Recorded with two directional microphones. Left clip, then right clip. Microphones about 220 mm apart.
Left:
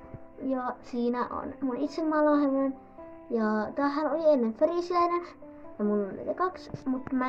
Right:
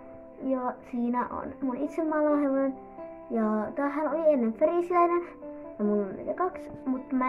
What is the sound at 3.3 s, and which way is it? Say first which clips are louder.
A child's voice: even; 5° left (ahead or behind).